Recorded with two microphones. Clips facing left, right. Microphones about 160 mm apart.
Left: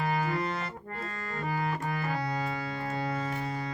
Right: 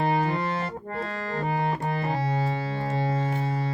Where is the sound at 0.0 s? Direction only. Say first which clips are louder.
Right 6 dB; 30° right (ahead or behind).